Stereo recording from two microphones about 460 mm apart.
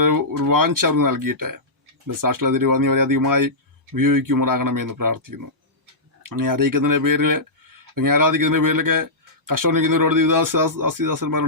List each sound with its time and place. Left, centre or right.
0.0 s a man's voice: right